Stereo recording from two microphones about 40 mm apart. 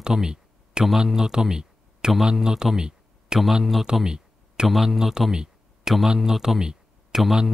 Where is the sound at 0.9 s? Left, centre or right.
Centre.